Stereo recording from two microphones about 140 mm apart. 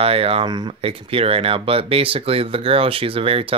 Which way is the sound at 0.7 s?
45° right (ahead or behind).